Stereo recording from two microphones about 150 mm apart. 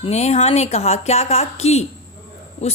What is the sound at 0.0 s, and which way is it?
A woman's voice, 45° left (ahead or behind).